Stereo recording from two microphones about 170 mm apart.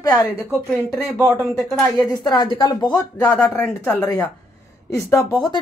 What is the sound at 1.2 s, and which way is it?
Speech, 5° right (ahead or behind).